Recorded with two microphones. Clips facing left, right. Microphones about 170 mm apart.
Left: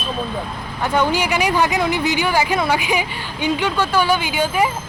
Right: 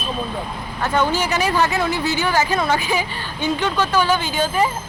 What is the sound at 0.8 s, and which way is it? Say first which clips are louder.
Speech: left 1 dB; 15° left (ahead or behind).